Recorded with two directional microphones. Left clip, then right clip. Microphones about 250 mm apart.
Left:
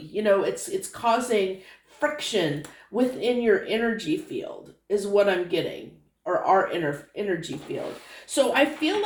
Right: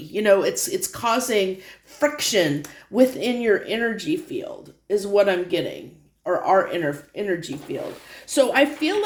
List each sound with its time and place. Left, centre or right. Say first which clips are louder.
0.1 s speech: right 4 dB; right